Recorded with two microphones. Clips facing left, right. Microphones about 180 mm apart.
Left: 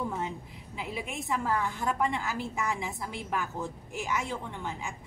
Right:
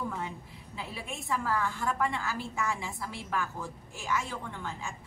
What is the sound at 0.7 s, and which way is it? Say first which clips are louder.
A woman's voice: left 4 dB; 15° left (ahead or behind).